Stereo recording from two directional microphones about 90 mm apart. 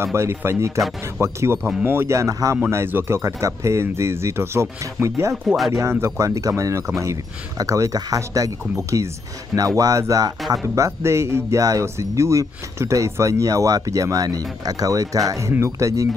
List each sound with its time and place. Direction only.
0.0 s speech: 30° right (ahead or behind)
0.7 s speech: centre (ahead or behind)
1.2 s speech: 30° right (ahead or behind)